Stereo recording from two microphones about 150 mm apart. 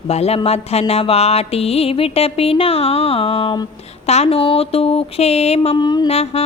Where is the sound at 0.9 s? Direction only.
40° left (ahead or behind).